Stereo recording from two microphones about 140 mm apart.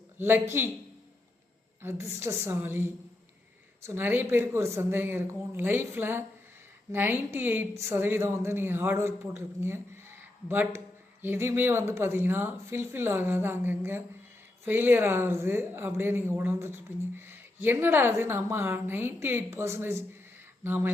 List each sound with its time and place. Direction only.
0.2 s speech: 15° right (ahead or behind)
1.8 s speech: 20° right (ahead or behind)